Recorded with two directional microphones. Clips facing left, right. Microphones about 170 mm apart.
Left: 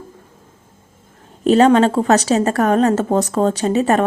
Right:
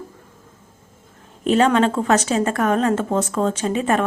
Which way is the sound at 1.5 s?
35° left (ahead or behind).